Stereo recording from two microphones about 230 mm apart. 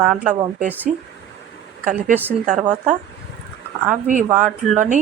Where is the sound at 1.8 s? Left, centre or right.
Right.